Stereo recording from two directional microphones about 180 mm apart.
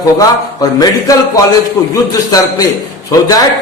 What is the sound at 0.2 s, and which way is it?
A man's voice, 20° left (ahead or behind).